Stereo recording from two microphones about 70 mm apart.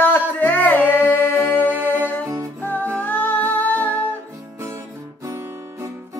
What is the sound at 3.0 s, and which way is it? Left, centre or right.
Music, left.